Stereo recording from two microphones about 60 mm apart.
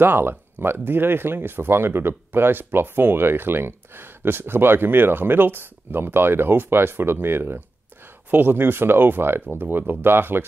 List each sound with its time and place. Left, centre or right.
0.0 s speech: right